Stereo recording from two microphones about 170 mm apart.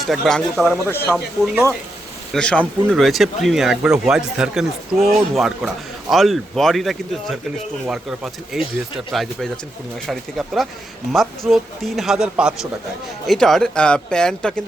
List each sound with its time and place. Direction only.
0.0 s speech: centre (ahead or behind)
0.9 s speech: 15° left (ahead or behind)
2.3 s speech: 5° left (ahead or behind)